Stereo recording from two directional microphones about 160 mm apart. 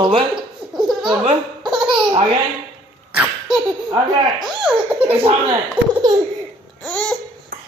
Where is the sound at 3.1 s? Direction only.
5° right (ahead or behind).